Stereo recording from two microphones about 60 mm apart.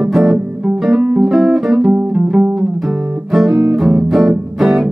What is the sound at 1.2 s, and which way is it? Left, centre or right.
Music, centre.